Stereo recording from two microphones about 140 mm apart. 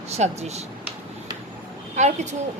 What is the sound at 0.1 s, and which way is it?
Speech, 50° right (ahead or behind).